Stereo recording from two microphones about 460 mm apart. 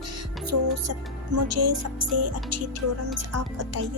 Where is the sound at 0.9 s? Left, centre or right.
Right.